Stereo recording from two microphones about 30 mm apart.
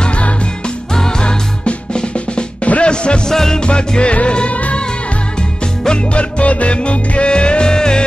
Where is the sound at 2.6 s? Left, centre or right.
Left.